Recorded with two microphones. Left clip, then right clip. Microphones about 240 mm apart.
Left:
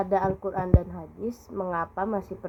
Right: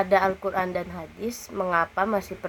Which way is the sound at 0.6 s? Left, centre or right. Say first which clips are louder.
Right 2 dB; right.